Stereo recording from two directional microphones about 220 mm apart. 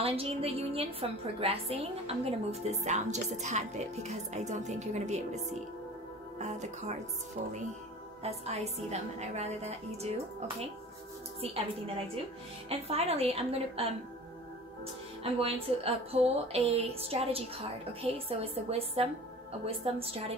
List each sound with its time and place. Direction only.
0.0 s a woman's voice: 25° right (ahead or behind)
8.2 s a woman's voice: 30° right (ahead or behind)
11.4 s a woman's voice: 25° right (ahead or behind)
12.6 s a woman's voice: 30° right (ahead or behind)
15.3 s a woman's voice: 25° right (ahead or behind)